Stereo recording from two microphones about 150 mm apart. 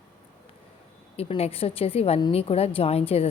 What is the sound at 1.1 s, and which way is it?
A woman's voice, 40° left (ahead or behind).